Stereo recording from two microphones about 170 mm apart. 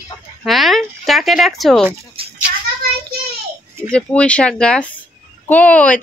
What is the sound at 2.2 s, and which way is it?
Cat, 35° right (ahead or behind).